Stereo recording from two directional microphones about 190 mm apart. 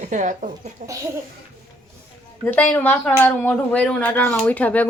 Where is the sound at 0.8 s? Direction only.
15° right (ahead or behind).